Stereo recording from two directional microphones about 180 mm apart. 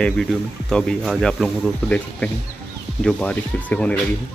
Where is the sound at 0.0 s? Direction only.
5° left (ahead or behind).